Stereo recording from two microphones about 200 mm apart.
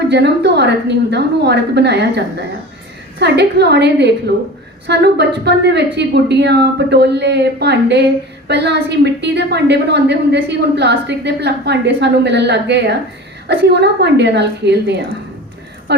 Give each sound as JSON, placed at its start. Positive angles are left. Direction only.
{"t": 0.1, "sound": "a woman's voice", "side_deg": -55}